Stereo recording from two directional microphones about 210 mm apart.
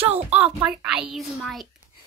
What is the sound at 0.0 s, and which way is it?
Speech, 30° right (ahead or behind).